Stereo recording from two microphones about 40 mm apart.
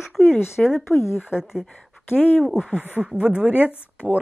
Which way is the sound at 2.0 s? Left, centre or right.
Left.